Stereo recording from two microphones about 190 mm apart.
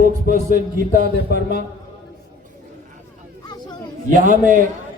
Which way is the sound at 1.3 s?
55° left (ahead or behind).